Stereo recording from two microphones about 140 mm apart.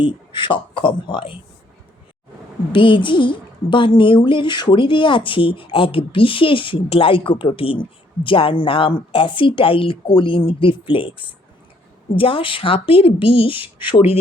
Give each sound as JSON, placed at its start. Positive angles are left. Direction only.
{"t": 0.0, "sound": "speech", "side_deg": 35}
{"t": 2.7, "sound": "speech", "side_deg": 35}